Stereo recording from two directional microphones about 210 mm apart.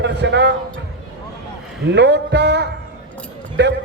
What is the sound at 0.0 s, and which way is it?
Speech, 55° right (ahead or behind).